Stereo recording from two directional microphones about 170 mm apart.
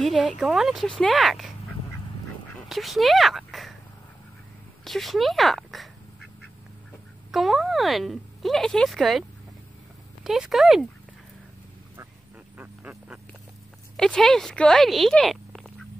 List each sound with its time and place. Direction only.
0.0 s speech: centre (ahead or behind)
2.7 s speech: centre (ahead or behind)
4.8 s speech: centre (ahead or behind)
7.2 s speech: centre (ahead or behind)
10.2 s speech: centre (ahead or behind)
12.5 s a sound: 10° right (ahead or behind)
13.9 s speech: 5° left (ahead or behind)